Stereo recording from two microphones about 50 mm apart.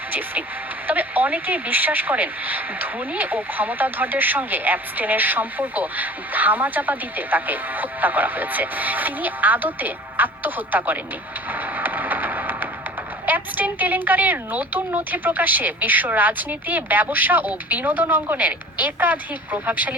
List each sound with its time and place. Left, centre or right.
0.1 s speech: right
11.5 s a sound: right
13.2 s speech: right